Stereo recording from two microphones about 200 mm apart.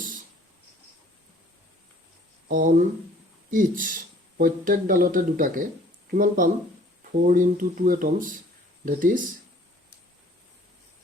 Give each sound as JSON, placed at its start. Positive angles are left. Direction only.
{"t": 2.5, "sound": "speech", "side_deg": -45}